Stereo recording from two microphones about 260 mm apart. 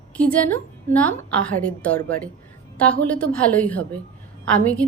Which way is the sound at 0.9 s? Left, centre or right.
Centre.